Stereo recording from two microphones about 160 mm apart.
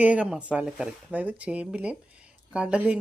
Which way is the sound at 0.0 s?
10° right (ahead or behind).